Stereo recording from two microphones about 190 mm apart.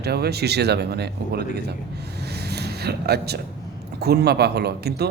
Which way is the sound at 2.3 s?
60° right (ahead or behind).